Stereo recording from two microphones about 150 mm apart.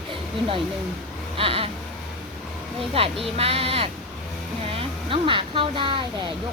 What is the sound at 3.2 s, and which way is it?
Speech, 40° right (ahead or behind).